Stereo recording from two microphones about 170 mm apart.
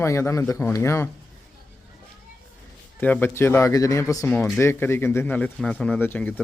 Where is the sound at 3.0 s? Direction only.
10° left (ahead or behind).